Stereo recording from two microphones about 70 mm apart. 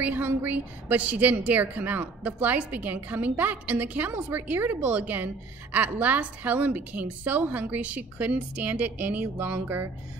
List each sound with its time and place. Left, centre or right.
0.0 s a woman's voice: right